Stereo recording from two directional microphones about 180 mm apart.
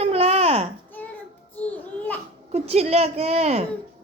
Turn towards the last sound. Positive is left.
turn(degrees=-35)  # may be behind; listen again after turning